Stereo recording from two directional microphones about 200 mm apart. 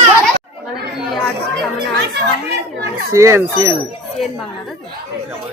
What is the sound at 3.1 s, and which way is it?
Speech, 15° right (ahead or behind).